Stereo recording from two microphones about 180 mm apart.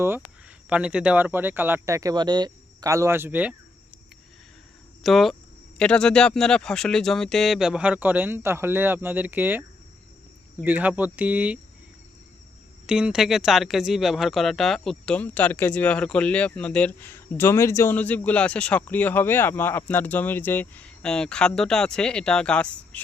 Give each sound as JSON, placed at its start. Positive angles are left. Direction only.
{"t": 0.7, "sound": "speech", "side_deg": -5}
{"t": 5.0, "sound": "speech", "side_deg": 0}
{"t": 12.9, "sound": "speech", "side_deg": -5}